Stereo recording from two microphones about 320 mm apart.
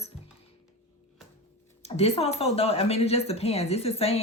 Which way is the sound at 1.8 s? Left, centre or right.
Centre.